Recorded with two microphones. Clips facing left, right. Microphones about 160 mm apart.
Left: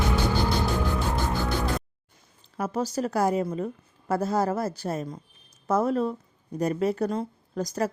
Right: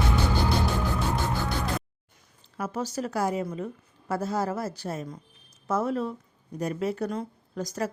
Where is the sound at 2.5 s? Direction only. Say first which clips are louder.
Left 3 dB; 40° left (ahead or behind).